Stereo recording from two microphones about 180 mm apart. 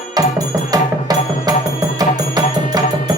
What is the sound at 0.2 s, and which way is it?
Music, 20° right (ahead or behind).